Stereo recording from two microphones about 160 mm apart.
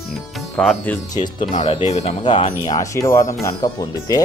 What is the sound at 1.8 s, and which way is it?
Speech, 45° left (ahead or behind).